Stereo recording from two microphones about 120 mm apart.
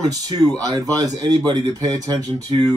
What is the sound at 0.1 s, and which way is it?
Speech, 30° right (ahead or behind).